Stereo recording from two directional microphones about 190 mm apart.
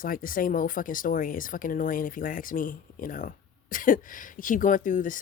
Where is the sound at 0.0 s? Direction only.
45° left (ahead or behind).